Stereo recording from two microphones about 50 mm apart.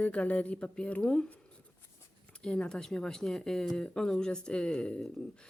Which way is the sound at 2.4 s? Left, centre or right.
Left.